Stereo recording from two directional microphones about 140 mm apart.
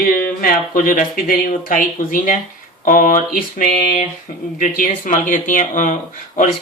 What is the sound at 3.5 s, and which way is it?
Speech, 85° left.